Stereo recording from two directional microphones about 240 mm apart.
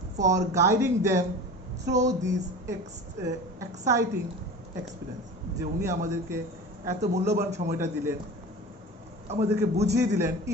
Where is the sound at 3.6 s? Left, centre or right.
Centre.